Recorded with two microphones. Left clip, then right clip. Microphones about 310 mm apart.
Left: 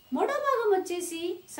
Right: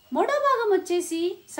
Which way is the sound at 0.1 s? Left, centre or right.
Right.